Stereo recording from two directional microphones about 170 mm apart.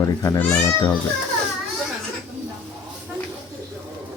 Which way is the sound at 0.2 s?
20° left (ahead or behind).